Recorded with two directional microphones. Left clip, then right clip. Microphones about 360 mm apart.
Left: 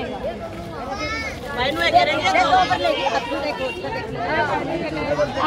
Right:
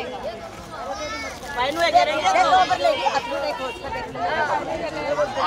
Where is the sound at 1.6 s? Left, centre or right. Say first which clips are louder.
Left 1 dB; centre.